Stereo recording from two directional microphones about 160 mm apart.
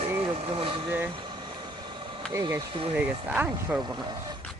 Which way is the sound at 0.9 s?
15° right (ahead or behind).